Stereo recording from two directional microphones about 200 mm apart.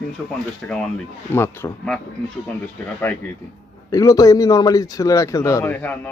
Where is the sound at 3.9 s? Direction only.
15° left (ahead or behind).